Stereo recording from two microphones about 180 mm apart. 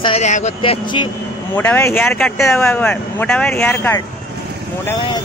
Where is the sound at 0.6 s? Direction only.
25° left (ahead or behind).